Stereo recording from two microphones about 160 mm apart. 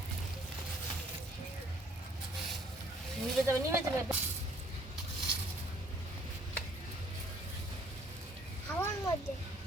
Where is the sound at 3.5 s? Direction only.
15° right (ahead or behind).